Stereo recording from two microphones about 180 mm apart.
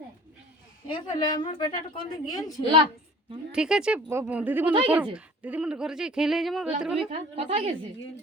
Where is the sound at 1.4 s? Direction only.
30° left (ahead or behind).